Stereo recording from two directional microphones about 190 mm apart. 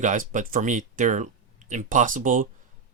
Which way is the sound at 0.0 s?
40° right (ahead or behind).